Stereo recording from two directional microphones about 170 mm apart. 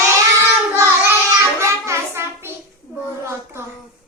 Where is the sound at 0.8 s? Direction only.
15° right (ahead or behind).